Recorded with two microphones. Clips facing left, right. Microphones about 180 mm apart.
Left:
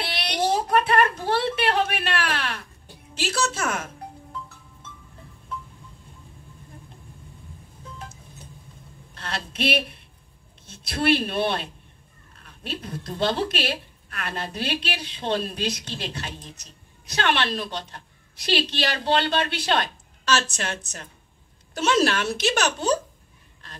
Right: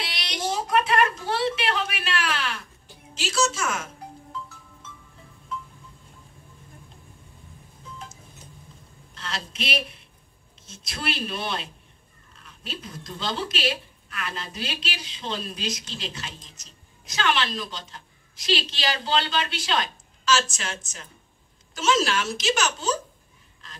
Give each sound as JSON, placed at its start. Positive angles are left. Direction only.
{"t": 0.0, "sound": "a sound", "side_deg": 60}
{"t": 3.2, "sound": "a woman's voice", "side_deg": 60}
{"t": 9.1, "sound": "a woman's voice", "side_deg": 60}